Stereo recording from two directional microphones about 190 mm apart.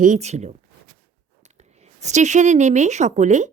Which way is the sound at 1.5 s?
35° right (ahead or behind).